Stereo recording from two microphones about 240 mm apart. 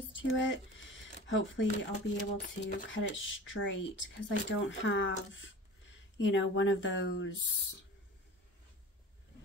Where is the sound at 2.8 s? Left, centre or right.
Left.